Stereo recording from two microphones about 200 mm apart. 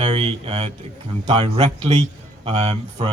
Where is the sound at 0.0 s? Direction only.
25° right (ahead or behind).